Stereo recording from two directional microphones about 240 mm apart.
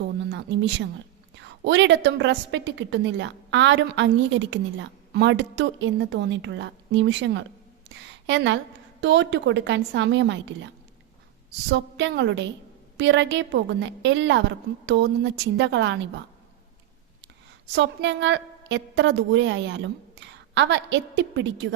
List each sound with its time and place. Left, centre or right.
0.3 s a woman's voice: right
11.7 s a woman's voice: right
17.7 s a woman's voice: right